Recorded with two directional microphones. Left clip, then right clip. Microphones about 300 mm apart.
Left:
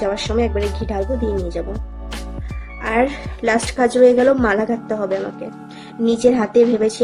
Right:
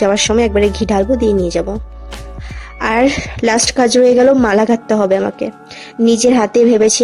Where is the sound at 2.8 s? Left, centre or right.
Right.